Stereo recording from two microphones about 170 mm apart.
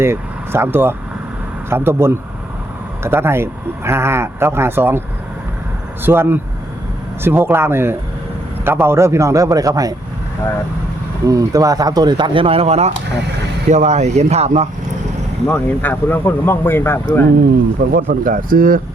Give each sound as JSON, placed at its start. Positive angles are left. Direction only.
{"t": 0.0, "sound": "speech", "side_deg": -15}
{"t": 11.3, "sound": "speech", "side_deg": -20}
{"t": 15.4, "sound": "speech", "side_deg": 10}
{"t": 17.9, "sound": "speech", "side_deg": -55}